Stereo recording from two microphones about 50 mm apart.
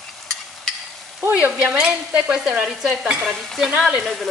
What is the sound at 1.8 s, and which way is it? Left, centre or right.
Stir, centre.